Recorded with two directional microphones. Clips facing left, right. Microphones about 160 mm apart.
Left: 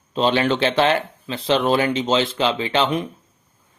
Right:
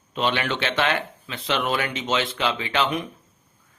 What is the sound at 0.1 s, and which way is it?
Speech, 35° left (ahead or behind).